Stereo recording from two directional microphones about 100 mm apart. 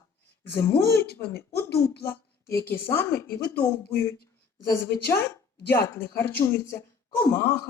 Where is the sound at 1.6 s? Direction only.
20° left (ahead or behind).